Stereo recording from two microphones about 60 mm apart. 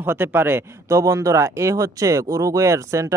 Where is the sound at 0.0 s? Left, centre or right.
Right.